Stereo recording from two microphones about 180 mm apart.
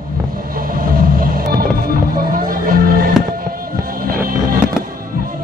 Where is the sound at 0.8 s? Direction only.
50° right (ahead or behind).